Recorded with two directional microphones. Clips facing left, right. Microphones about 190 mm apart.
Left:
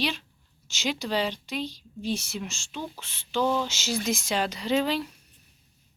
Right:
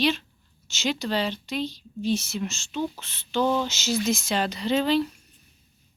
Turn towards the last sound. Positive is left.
turn(degrees=10)  # may be behind; listen again after turning